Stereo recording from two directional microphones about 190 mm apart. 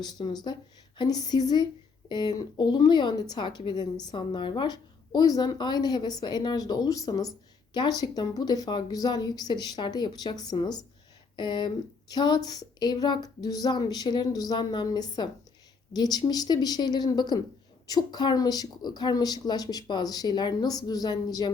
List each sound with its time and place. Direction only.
0.0 s speech: 20° left (ahead or behind)